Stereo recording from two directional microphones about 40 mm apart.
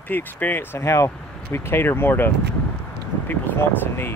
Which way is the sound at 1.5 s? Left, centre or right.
Left.